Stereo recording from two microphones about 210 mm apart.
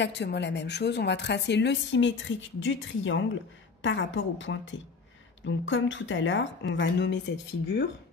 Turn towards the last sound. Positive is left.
turn(degrees=55)  # may be behind; listen again after turning